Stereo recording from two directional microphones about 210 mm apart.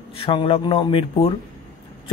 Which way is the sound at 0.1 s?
25° left (ahead or behind).